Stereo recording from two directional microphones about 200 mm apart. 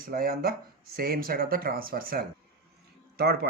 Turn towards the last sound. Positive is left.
turn(degrees=-50)  # may be behind; listen again after turning